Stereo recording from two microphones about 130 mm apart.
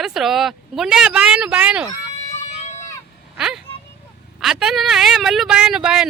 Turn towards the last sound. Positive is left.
turn(degrees=-5)  # may be behind; listen again after turning